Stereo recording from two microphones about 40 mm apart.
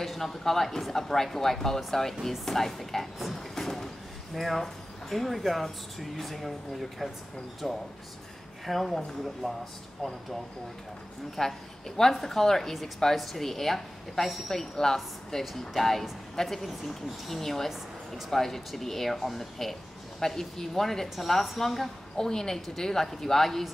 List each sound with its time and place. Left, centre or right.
0.0 s a woman's voice: centre
3.3 s drawer open or close: centre
5.1 s speech: centre
8.8 s a woman's voice: centre
11.4 s a woman's voice: centre